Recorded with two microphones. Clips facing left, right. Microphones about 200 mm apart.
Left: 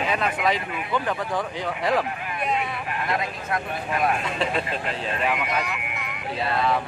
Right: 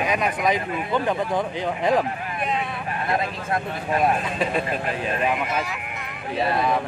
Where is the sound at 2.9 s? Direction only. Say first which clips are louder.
Right 4 dB; 30° right (ahead or behind).